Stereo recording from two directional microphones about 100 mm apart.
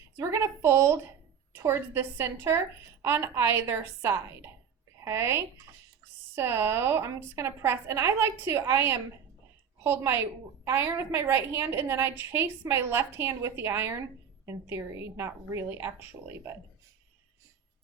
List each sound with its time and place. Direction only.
0.2 s a woman's voice: 30° right (ahead or behind)